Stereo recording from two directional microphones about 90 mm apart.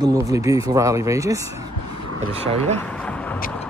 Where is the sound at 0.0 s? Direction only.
40° right (ahead or behind).